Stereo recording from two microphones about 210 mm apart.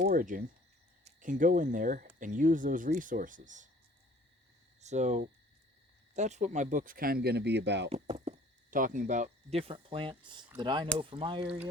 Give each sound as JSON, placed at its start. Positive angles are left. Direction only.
{"t": 0.0, "sound": "speech", "side_deg": -40}
{"t": 4.8, "sound": "speech", "side_deg": -35}
{"t": 7.9, "sound": "speech", "side_deg": -30}
{"t": 11.4, "sound": "speech", "side_deg": -10}